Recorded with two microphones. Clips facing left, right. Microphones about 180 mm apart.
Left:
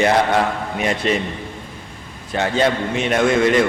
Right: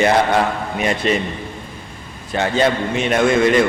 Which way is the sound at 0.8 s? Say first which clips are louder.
Right 1 dB; 10° right (ahead or behind).